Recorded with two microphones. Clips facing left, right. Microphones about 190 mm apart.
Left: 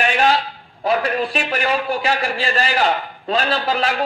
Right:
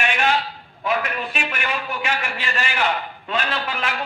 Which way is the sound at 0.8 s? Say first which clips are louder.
Left 5 dB; 35° left (ahead or behind).